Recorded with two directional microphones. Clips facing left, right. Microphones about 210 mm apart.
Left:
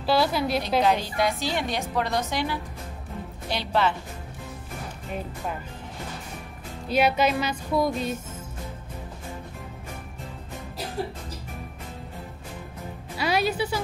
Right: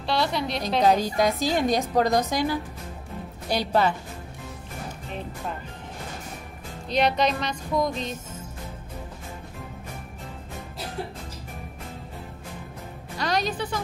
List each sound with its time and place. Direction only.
0.0 s a woman's voice: 5° left (ahead or behind)
0.8 s a woman's voice: 40° right (ahead or behind)
6.9 s speech: 5° left (ahead or behind)
13.2 s a woman's voice: 10° left (ahead or behind)